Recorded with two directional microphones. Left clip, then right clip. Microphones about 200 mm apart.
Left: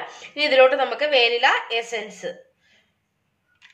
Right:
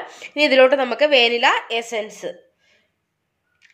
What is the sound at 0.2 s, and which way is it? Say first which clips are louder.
Speech: right 2 dB; 40° right (ahead or behind).